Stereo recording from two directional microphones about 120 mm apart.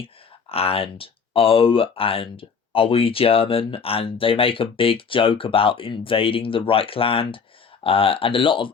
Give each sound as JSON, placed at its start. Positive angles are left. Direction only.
{"t": 0.5, "sound": "speech", "side_deg": 55}